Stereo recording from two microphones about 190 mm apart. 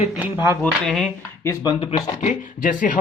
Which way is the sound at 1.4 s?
25° left (ahead or behind).